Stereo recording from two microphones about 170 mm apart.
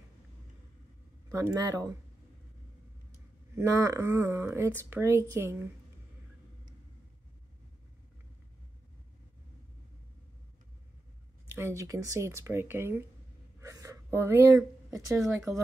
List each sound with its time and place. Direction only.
1.3 s speech: 20° right (ahead or behind)
3.5 s speech: 15° right (ahead or behind)
11.5 s speech: 15° right (ahead or behind)